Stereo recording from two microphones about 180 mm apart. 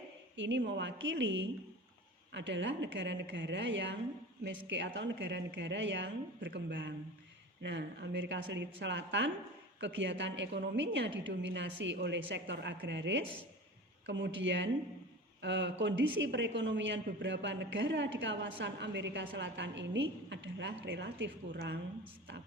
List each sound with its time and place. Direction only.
0.3 s a woman's voice: 90° right; by 21.8 s 75° right (ahead or behind)